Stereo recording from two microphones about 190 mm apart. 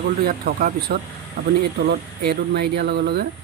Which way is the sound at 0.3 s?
50° right (ahead or behind).